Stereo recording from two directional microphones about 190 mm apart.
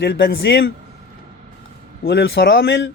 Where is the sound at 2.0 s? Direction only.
75° left (ahead or behind).